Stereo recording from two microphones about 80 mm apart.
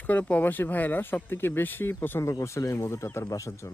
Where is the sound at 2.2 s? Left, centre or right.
Left.